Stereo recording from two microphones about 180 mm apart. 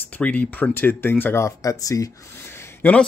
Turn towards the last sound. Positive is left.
turn(degrees=10)  # may be behind; listen again after turning